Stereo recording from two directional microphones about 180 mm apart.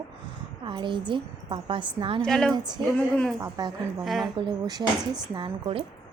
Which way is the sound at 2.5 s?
25° right (ahead or behind).